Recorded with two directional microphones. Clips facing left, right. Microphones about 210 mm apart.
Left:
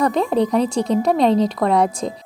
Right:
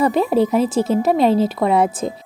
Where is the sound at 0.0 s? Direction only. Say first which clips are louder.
Right 2 dB; 5° right (ahead or behind).